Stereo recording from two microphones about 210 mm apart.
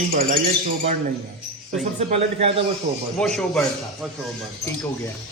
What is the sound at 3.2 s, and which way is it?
Speech, 5° left (ahead or behind).